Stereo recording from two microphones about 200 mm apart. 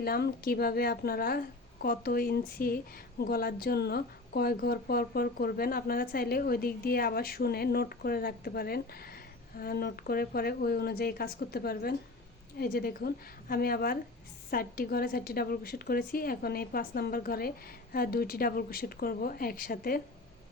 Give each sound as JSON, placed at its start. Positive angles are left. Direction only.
{"t": 0.0, "sound": "a woman's voice", "side_deg": 50}